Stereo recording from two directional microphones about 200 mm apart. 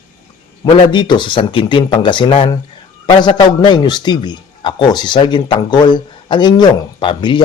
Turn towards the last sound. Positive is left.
turn(degrees=25)  # may be behind; listen again after turning